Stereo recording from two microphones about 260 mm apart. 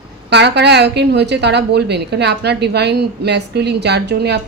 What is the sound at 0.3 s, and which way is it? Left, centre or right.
A woman's voice, right.